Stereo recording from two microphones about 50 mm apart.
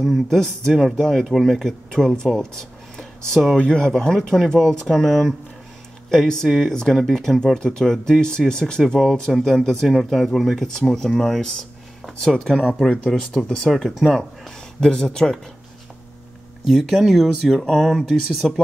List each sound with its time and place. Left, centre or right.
0.0 s speech: centre
13.1 s speech: centre
16.6 s speech: centre